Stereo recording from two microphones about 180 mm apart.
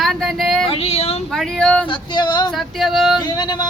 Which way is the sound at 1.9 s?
25° left (ahead or behind).